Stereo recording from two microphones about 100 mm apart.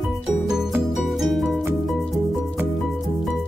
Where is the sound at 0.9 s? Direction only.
Centre (ahead or behind).